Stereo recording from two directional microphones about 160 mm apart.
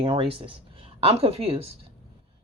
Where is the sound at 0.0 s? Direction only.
35° right (ahead or behind).